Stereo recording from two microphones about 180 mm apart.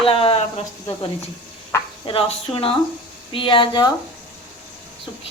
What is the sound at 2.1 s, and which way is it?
A woman's voice, 30° left (ahead or behind).